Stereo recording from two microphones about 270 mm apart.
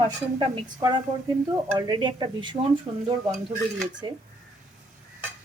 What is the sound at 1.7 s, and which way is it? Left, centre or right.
A woman's voice, centre.